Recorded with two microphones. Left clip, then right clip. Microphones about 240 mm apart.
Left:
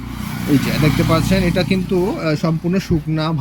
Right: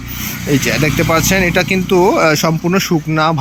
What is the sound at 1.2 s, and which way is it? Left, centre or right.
Speech, centre.